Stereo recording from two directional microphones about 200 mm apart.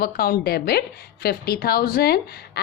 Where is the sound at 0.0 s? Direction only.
50° left (ahead or behind).